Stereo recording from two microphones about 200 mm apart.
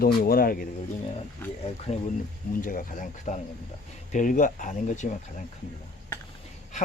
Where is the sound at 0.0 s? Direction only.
50° left (ahead or behind).